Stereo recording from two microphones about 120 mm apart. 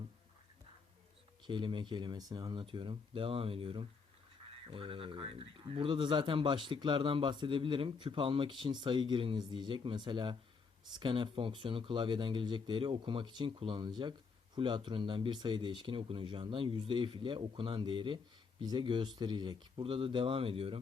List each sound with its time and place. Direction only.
1.5 s speech: 40° right (ahead or behind)